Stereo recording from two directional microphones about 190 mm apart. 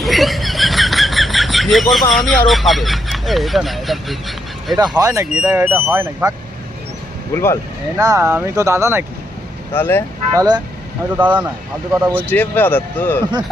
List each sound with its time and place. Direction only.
0.0 s a sound: centre (ahead or behind)
2.5 s speech: centre (ahead or behind)
4.8 s speech: 20° right (ahead or behind)
5.3 s speech: 5° right (ahead or behind)
7.3 s speech: 15° left (ahead or behind)
7.9 s speech: 15° right (ahead or behind)
9.7 s speech: 10° left (ahead or behind)
10.3 s speech: 20° right (ahead or behind)
11.2 s speech: 10° right (ahead or behind)
12.3 s speech: 10° left (ahead or behind)